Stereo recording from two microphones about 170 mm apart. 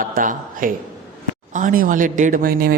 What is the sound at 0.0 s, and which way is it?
A man's voice, 55° right (ahead or behind).